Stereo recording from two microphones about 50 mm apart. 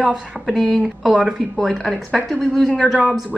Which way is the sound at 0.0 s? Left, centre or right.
Centre.